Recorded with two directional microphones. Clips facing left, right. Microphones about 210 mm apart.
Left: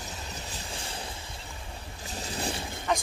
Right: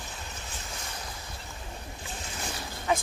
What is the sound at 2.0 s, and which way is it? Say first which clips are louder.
Boat: left 6 dB; 35° left (ahead or behind).